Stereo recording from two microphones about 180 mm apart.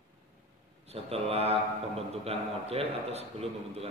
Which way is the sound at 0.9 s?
35° right (ahead or behind).